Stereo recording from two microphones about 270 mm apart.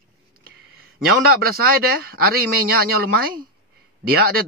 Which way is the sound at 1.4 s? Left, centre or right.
Right.